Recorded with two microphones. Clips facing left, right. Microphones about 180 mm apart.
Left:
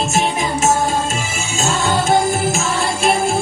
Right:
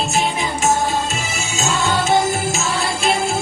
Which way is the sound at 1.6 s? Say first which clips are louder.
Left 2 dB; 50° left (ahead or behind).